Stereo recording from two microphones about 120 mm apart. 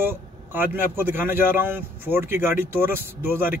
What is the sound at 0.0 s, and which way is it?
Speech, 15° right (ahead or behind).